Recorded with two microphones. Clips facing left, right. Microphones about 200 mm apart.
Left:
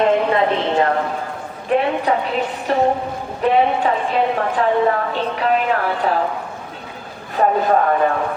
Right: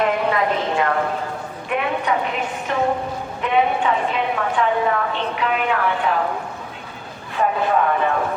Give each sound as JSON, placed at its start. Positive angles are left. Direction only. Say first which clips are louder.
{"t": 0.0, "sound": "clip-clop", "louder": "left 4 dB", "side_deg": 30}
{"t": 1.7, "sound": "a sound", "louder": "left 5 dB", "side_deg": 30}
{"t": 2.7, "sound": "a woman's voice", "louder": "left 4 dB", "side_deg": 35}
{"t": 7.3, "sound": "a woman's voice", "louder": "left 3 dB", "side_deg": 40}